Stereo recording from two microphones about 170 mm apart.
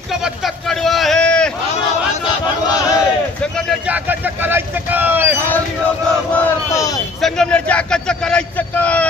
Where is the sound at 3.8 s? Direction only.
10° right (ahead or behind).